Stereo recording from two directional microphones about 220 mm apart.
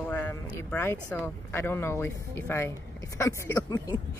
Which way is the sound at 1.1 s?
10° left (ahead or behind).